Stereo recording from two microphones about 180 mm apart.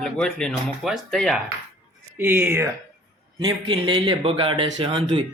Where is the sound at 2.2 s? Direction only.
10° right (ahead or behind).